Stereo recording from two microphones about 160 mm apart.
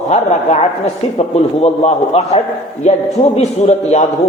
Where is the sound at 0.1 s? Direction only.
45° left (ahead or behind).